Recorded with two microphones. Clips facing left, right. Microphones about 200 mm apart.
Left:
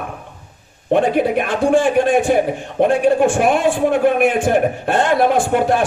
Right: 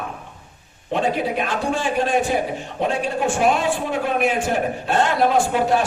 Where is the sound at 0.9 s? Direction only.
55° left (ahead or behind).